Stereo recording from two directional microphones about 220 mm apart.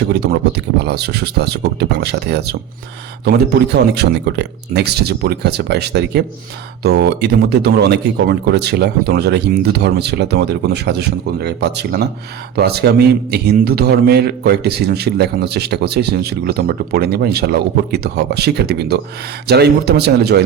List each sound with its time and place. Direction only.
0.1 s a man's voice: 50° right (ahead or behind)